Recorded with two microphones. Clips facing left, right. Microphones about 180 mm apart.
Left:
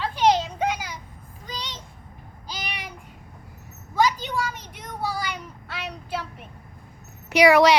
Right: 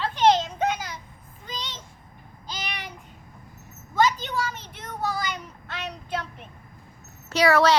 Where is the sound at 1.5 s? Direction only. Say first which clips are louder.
Left 1 dB; 10° left (ahead or behind).